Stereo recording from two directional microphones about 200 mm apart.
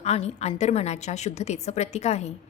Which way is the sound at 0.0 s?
30° left (ahead or behind).